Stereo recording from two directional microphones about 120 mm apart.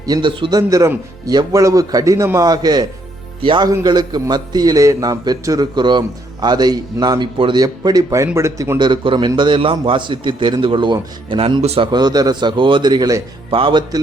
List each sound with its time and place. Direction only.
0.0 s a man's voice: 35° right (ahead or behind)
0.7 s a man's voice: 25° right (ahead or behind); by 7.6 s 40° right (ahead or behind)
7.6 s speech: 30° right (ahead or behind)
8.8 s a man's voice: 40° right (ahead or behind)
11.9 s a man's voice: 35° right (ahead or behind)
13.5 s a man's voice: 45° right (ahead or behind)